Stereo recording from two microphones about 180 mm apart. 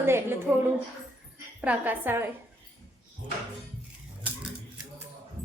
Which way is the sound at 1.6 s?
10° right (ahead or behind).